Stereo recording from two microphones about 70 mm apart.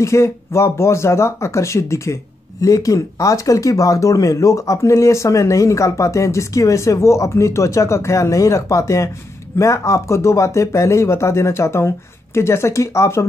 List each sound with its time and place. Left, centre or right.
0.0 s speech: left